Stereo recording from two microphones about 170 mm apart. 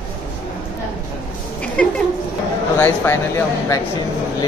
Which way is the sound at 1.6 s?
5° left (ahead or behind).